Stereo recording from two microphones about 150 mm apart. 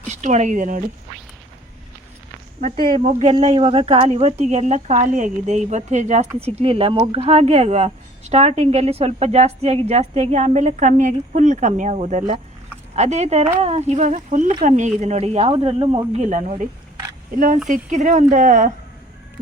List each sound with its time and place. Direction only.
0.1 s speech: 55° right (ahead or behind)
2.9 s speech: 55° right (ahead or behind)
3.4 s speech: 40° right (ahead or behind)
6.4 s speech: 40° right (ahead or behind)
17.3 s speech: 65° right (ahead or behind)
17.7 s speech: 55° right (ahead or behind)